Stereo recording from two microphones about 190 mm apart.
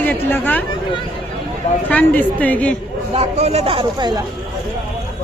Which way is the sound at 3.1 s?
35° right (ahead or behind).